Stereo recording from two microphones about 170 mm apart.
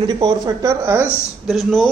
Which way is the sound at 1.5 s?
Centre (ahead or behind).